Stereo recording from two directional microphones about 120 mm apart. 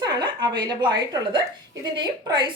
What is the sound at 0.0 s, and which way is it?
A woman's voice, 35° right (ahead or behind).